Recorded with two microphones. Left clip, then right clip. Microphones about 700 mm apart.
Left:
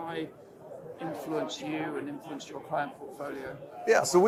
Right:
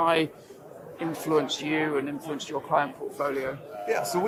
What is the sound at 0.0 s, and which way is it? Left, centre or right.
Speech, right.